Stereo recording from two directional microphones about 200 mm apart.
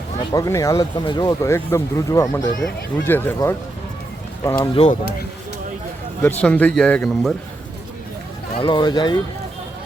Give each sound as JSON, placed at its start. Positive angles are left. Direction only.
{"t": 0.3, "sound": "speech", "side_deg": 15}
{"t": 4.7, "sound": "speech", "side_deg": 30}
{"t": 6.2, "sound": "a man's voice", "side_deg": 5}
{"t": 8.5, "sound": "speech", "side_deg": 25}